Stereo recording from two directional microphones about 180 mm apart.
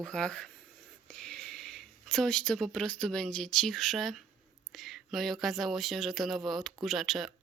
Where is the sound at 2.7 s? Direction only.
5° left (ahead or behind).